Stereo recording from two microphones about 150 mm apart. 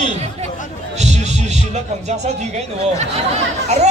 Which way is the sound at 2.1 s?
50° right (ahead or behind).